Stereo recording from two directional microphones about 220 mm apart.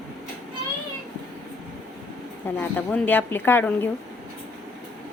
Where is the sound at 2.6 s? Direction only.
5° left (ahead or behind).